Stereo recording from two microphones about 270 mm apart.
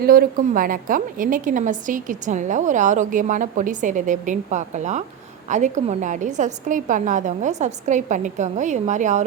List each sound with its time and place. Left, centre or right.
0.0 s a woman's voice: right